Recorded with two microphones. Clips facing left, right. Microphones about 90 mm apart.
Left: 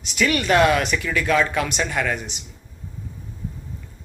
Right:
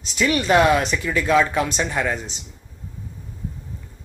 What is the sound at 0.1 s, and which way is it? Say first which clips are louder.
Speech: right 1 dB; 25° right (ahead or behind).